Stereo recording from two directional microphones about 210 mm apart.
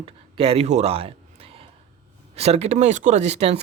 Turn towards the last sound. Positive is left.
turn(degrees=-30)  # may be behind; listen again after turning